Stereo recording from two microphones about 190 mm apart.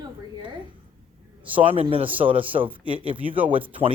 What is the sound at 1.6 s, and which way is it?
A woman's voice, 30° right (ahead or behind).